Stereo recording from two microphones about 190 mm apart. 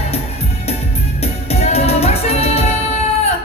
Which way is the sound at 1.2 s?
35° left (ahead or behind).